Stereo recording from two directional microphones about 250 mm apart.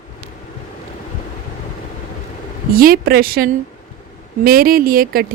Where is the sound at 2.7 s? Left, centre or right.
Right.